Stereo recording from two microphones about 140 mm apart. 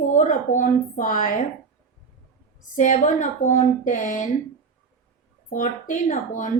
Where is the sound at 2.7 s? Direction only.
60° left (ahead or behind).